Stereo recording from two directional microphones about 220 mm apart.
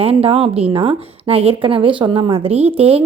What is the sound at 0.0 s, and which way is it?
A woman's voice, 25° right (ahead or behind).